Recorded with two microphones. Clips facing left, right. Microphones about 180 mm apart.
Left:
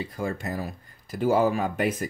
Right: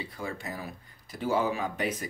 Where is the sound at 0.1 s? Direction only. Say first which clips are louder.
Left 6 dB; 45° left (ahead or behind).